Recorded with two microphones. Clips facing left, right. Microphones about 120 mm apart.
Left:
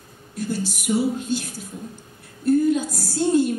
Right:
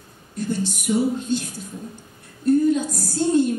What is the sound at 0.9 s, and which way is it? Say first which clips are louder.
Speech: right 1 dB; 45° left (ahead or behind).